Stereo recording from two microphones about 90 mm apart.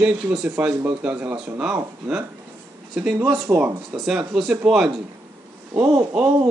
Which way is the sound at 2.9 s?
10° right (ahead or behind).